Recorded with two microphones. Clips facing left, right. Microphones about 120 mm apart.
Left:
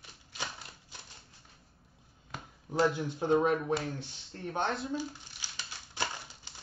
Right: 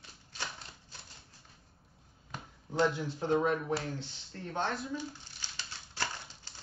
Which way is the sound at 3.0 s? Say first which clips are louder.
Left 3 dB; 20° left (ahead or behind).